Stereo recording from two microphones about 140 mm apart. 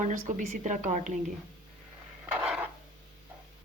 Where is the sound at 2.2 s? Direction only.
10° right (ahead or behind).